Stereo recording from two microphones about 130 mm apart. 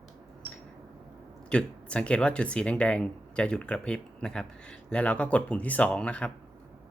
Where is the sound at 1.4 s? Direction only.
10° left (ahead or behind).